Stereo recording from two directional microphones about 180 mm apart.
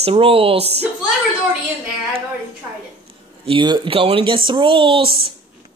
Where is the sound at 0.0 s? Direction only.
30° right (ahead or behind).